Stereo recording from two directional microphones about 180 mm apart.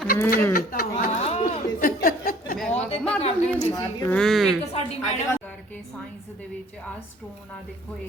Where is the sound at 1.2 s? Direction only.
35° left (ahead or behind).